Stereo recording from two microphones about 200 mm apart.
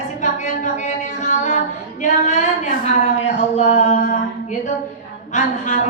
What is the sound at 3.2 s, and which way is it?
Speech, 35° left (ahead or behind).